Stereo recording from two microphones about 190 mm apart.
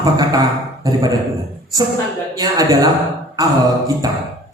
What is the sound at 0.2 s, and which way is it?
Speech, 20° right (ahead or behind).